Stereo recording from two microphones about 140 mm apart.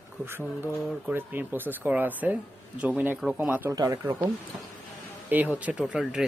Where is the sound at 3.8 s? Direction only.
25° right (ahead or behind).